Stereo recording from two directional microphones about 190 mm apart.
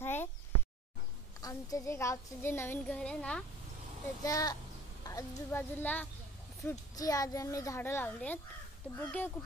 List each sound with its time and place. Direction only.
0.0 s a sound: 10° left (ahead or behind)
1.4 s a woman's voice: 15° left (ahead or behind)
4.2 s a child's voice: 20° left (ahead or behind)